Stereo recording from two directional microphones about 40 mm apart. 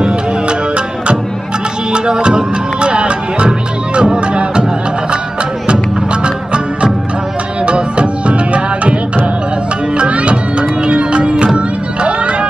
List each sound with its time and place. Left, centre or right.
0.0 s music: right
5.7 s music: right